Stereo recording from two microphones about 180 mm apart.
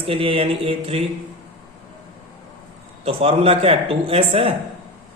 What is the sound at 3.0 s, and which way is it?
Speech, 35° right (ahead or behind).